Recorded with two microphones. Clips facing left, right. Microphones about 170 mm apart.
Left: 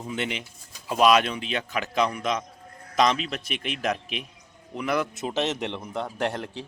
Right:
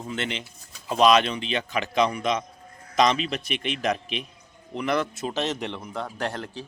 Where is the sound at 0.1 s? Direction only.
10° left (ahead or behind).